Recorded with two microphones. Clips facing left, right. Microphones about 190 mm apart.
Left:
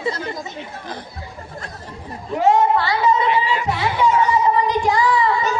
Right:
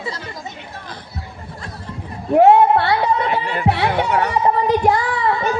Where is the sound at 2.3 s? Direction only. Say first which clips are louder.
Right 5 dB; 60° right (ahead or behind).